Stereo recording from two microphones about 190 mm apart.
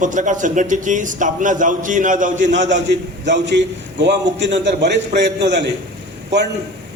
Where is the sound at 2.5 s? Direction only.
70° right (ahead or behind).